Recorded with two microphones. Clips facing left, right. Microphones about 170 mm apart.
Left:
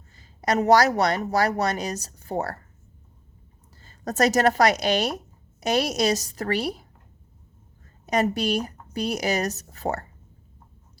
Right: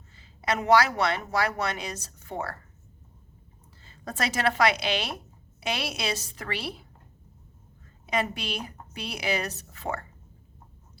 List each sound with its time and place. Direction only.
0.2 s speech: 40° left (ahead or behind)
3.8 s speech: 40° left (ahead or behind)
8.0 s speech: 40° left (ahead or behind)